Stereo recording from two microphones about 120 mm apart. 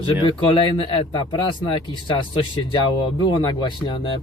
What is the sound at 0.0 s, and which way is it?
Speech, 45° left (ahead or behind).